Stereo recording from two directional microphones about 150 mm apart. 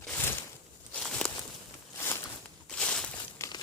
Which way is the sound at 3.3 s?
20° left (ahead or behind).